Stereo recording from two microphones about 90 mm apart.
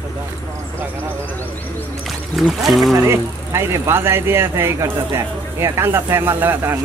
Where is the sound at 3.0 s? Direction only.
30° right (ahead or behind).